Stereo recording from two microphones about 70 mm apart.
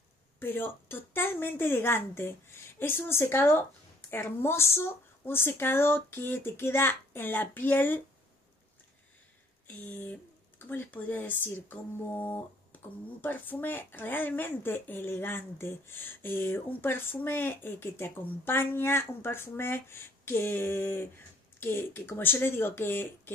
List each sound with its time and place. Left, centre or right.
0.4 s speech: left
9.8 s speech: left